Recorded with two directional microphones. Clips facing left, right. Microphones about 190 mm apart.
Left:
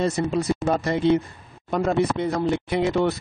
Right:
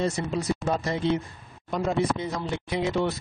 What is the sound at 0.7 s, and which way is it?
Speech, 60° left (ahead or behind).